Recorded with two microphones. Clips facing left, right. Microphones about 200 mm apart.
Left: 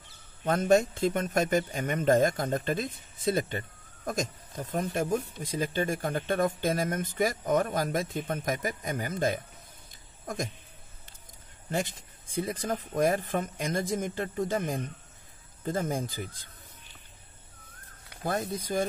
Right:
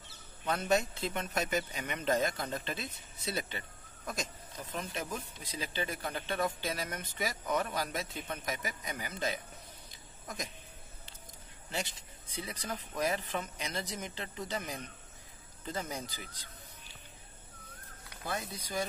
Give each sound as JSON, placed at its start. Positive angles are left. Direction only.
{"t": 0.5, "sound": "a man's voice", "side_deg": 45}
{"t": 11.7, "sound": "a man's voice", "side_deg": 50}
{"t": 18.2, "sound": "a man's voice", "side_deg": 50}